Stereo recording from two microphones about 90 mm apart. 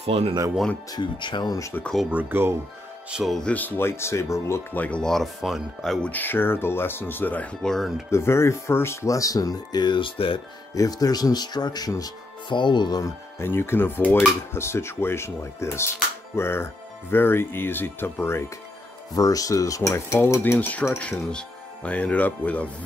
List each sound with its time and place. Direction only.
0.1 s speech: 90° right
0.9 s speech: 60° left (ahead or behind)
2.0 s speech: 20° right (ahead or behind)
3.1 s speech: 5° right (ahead or behind)
3.3 s speech: 15° left (ahead or behind); by 4.6 s 30° left (ahead or behind)
4.7 s speech: 15° left (ahead or behind); by 5.9 s centre (ahead or behind)
6.0 s speech: 20° left (ahead or behind)
7.6 s speech: 5° left (ahead or behind)
8.1 s speech: 30° left (ahead or behind); by 10.4 s 70° left (ahead or behind)
10.7 s speech: 45° left (ahead or behind)
12.4 s speech: 60° left (ahead or behind)
13.0 s speech: 25° left (ahead or behind)
19.1 s speech: 40° left (ahead or behind)
20.5 s speech: 15° left (ahead or behind)